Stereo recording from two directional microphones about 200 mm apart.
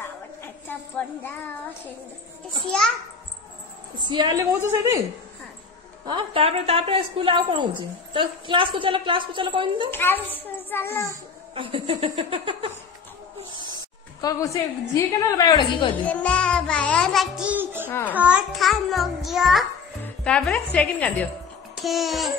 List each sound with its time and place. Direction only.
0.4 s a child's voice: 10° left (ahead or behind)
4.1 s a woman's voice: 20° right (ahead or behind)
6.0 s a woman's voice: 25° right (ahead or behind)
9.8 s a woman's voice: 10° left (ahead or behind)
11.5 s a woman's voice: 25° right (ahead or behind)
14.2 s a woman's voice: 15° left (ahead or behind)
16.1 s music: 5° left (ahead or behind)
17.8 s a child's voice: 10° left (ahead or behind)
18.1 s a child's voice: 5° right (ahead or behind)